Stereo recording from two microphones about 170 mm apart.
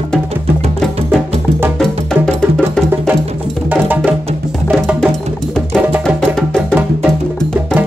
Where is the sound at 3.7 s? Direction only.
10° right (ahead or behind).